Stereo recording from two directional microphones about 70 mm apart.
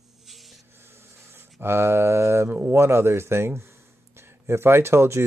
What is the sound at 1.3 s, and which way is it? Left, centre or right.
Speech, right.